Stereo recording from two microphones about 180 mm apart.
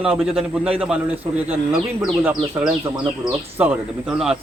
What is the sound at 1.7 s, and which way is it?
A man's voice, 5° right (ahead or behind).